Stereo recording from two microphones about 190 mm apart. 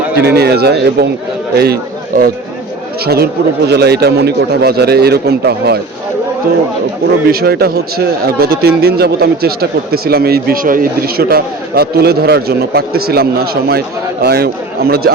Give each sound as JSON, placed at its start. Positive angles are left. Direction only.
{"t": 0.2, "sound": "a man's voice", "side_deg": -60}
{"t": 7.3, "sound": "speech", "side_deg": -55}